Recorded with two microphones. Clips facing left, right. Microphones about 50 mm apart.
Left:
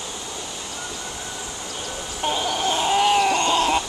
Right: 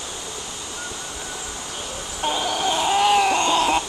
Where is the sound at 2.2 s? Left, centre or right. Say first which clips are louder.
Even; centre.